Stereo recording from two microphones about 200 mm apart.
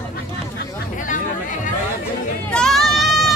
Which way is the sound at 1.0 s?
40° left (ahead or behind).